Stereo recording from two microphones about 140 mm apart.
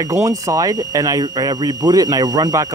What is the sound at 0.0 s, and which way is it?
Speech, 25° right (ahead or behind).